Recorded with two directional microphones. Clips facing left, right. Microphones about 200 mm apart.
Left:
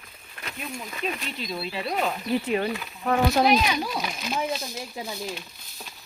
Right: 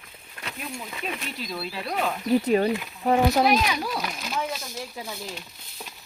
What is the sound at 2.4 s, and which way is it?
Speech, 35° right (ahead or behind).